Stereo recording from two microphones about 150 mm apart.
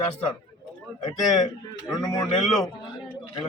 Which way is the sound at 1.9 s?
25° left (ahead or behind).